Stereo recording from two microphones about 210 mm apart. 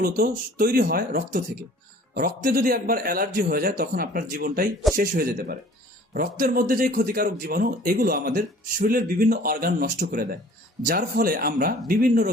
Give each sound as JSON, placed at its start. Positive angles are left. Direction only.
{"t": 0.0, "sound": "speech", "side_deg": -45}